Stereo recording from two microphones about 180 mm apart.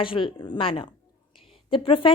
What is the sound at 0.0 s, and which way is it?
A woman's voice, 30° left (ahead or behind).